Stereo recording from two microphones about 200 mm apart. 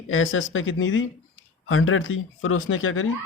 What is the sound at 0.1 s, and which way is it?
Speech, 80° left.